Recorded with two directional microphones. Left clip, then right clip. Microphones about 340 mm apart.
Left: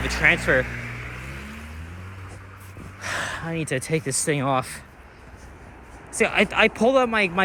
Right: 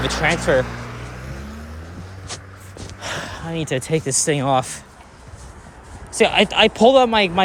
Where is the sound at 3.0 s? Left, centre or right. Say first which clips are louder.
Even; centre.